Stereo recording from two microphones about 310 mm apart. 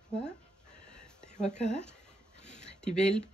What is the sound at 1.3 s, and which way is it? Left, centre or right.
Speech, left.